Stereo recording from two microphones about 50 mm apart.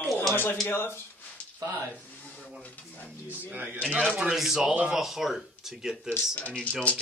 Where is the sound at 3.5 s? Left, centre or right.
Right.